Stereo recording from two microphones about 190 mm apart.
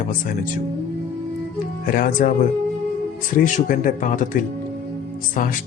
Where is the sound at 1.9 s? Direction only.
50° left (ahead or behind).